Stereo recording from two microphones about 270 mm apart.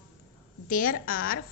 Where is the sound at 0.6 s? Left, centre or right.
Left.